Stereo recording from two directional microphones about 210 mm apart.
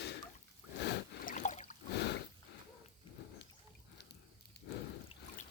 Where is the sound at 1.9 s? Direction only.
55° left (ahead or behind).